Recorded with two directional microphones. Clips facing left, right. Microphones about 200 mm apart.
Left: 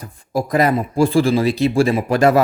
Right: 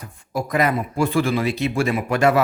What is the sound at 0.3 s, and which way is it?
A man's voice, 35° left (ahead or behind).